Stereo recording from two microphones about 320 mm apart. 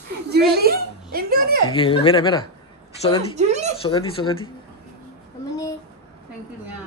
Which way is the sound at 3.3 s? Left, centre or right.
Right.